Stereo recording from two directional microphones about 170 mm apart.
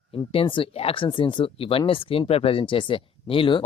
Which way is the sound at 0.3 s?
30° left (ahead or behind).